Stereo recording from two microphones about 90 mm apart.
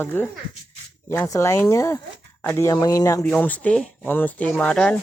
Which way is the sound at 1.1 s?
35° left (ahead or behind).